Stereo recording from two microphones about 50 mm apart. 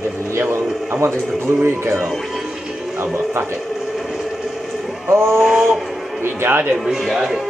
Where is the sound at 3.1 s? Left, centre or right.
Right.